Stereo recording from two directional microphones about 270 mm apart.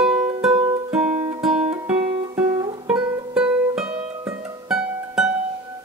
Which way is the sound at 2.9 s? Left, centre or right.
Centre.